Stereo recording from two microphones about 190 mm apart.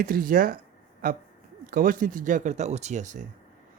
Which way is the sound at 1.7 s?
50° right (ahead or behind).